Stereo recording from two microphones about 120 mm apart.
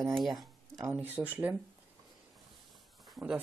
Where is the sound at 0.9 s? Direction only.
15° right (ahead or behind).